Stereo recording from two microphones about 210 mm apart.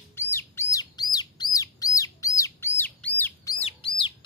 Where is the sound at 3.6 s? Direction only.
25° left (ahead or behind).